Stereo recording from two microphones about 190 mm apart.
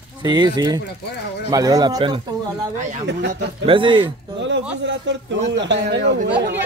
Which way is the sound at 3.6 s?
25° right (ahead or behind).